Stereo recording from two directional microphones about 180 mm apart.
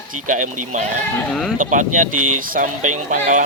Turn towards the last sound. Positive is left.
turn(degrees=-45)  # may be behind; listen again after turning